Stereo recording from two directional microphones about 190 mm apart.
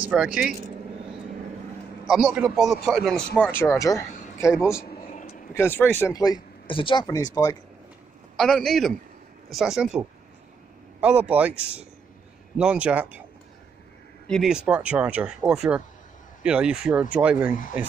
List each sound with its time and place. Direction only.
0.1 s speech: 5° right (ahead or behind)
2.0 s speech: 5° right (ahead or behind)
3.9 s speech: 15° left (ahead or behind)
5.1 s vehicle: 35° left (ahead or behind)
5.5 s speech: 10° left (ahead or behind)
8.4 s a man's voice: centre (ahead or behind)
14.3 s speech: 5° right (ahead or behind)